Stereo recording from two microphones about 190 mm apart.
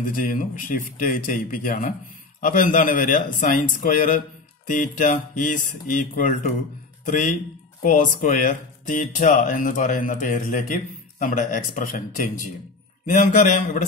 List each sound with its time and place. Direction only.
0.1 s a man's voice: 45° left (ahead or behind)